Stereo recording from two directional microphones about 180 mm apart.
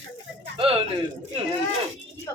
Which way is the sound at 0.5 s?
30° right (ahead or behind).